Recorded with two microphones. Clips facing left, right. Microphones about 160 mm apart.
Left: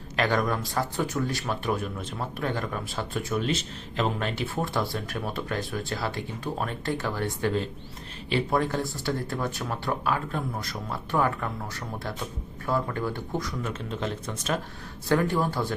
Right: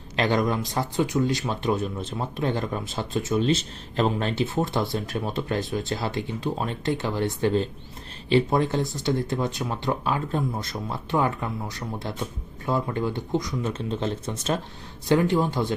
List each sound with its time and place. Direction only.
0.2 s speech: 25° right (ahead or behind)
4.4 s speech: 20° right (ahead or behind)